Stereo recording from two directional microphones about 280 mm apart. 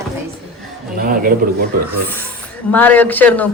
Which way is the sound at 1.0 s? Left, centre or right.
Right.